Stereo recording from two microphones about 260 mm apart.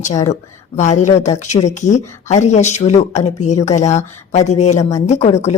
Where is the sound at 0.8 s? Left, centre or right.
Left.